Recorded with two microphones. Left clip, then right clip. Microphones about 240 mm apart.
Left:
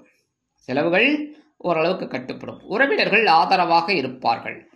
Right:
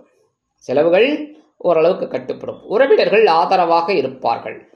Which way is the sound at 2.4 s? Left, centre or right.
Left.